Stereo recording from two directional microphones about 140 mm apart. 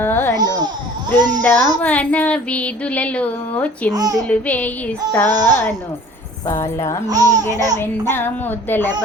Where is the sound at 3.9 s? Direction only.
25° right (ahead or behind).